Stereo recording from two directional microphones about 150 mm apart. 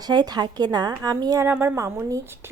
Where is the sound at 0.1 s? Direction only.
30° right (ahead or behind).